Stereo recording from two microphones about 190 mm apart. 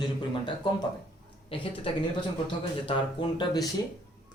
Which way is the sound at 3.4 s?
20° left (ahead or behind).